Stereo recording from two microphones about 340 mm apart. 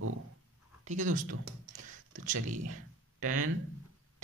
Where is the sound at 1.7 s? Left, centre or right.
Right.